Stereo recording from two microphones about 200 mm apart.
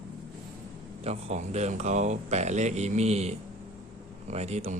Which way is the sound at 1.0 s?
35° right (ahead or behind).